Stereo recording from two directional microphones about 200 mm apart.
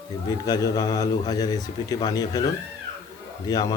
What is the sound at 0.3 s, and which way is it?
A man's voice, 20° left (ahead or behind).